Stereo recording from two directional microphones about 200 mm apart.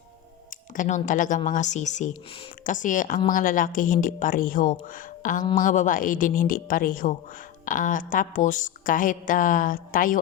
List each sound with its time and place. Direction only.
0.8 s speech: 40° left (ahead or behind)